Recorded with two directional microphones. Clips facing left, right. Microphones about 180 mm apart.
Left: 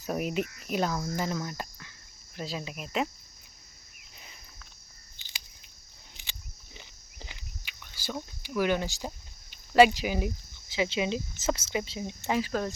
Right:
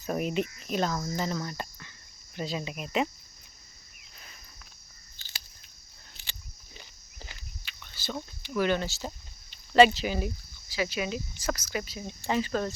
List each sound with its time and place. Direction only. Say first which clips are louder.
0.0 s speech: right 1 dB; 5° left (ahead or behind)
5.1 s a sound: right 2 dB; 15° left (ahead or behind)
6.7 s walk: even; 20° left (ahead or behind)
12.3 s speech: right 1 dB; 5° left (ahead or behind)